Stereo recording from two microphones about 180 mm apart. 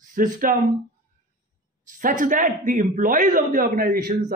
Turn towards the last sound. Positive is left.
turn(degrees=-55)  # may be behind; listen again after turning